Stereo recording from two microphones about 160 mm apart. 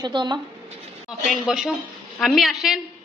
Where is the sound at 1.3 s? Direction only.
5° right (ahead or behind).